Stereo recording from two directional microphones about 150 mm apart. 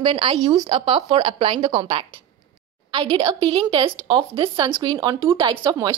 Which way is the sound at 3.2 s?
25° right (ahead or behind).